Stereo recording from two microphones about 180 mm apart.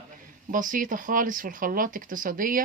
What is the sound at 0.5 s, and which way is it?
Speech, 45° right (ahead or behind).